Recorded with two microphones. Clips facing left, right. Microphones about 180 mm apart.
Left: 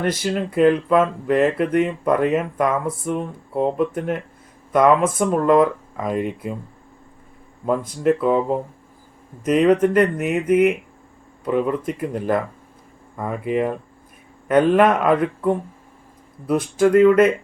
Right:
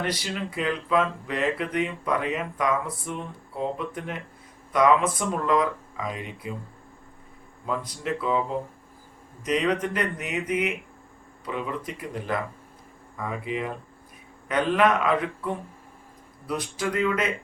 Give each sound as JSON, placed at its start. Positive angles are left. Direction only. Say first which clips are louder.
{"t": 0.0, "sound": "speech", "louder": "left 8 dB", "side_deg": 50}
{"t": 7.6, "sound": "speech", "louder": "left 10 dB", "side_deg": 50}